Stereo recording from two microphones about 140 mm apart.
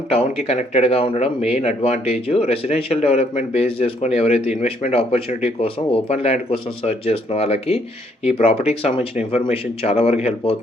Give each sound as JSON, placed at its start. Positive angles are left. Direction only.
{"t": 0.1, "sound": "speech", "side_deg": 45}